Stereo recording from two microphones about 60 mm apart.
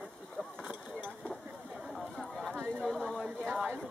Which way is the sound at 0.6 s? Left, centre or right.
Right.